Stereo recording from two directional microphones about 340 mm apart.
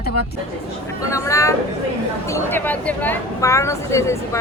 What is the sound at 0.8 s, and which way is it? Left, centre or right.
Speech, centre.